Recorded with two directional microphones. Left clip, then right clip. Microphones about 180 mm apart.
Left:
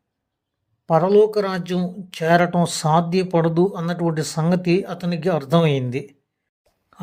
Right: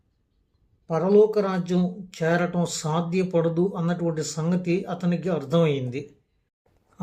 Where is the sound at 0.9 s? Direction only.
40° left (ahead or behind).